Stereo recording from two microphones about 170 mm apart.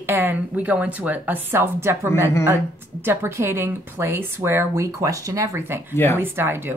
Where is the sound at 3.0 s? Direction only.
15° right (ahead or behind).